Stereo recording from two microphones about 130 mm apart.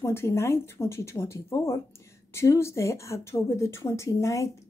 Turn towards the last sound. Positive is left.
turn(degrees=25)  # may be behind; listen again after turning